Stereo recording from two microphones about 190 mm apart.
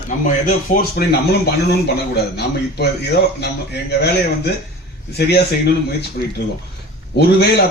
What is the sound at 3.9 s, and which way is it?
Speech, 60° left (ahead or behind).